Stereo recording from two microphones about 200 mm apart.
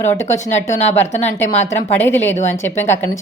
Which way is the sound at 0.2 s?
15° left (ahead or behind).